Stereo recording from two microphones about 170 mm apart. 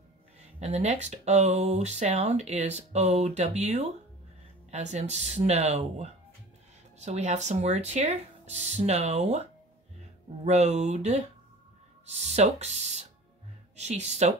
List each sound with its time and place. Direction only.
0.6 s speech: 40° right (ahead or behind)
10.4 s speech: 40° right (ahead or behind)